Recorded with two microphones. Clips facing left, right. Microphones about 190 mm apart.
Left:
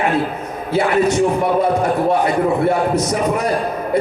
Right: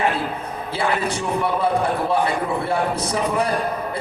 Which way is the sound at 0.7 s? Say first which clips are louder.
Left 8 dB; 30° right (ahead or behind).